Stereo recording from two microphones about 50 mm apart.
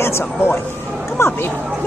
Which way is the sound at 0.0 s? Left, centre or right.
Left.